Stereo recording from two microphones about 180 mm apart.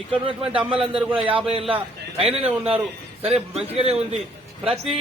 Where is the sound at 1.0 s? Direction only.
10° right (ahead or behind).